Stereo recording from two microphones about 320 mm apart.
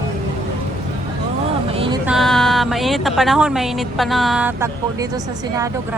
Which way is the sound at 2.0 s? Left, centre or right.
Centre.